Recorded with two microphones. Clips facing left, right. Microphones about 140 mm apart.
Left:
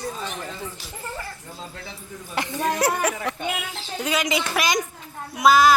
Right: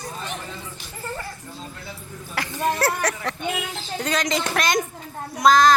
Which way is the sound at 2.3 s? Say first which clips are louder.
Even; 20° left (ahead or behind).